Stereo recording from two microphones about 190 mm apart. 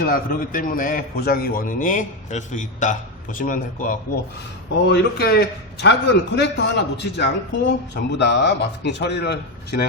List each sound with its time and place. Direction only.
0.0 s a man's voice: 50° left (ahead or behind)
4.9 s a man's voice: 55° left (ahead or behind)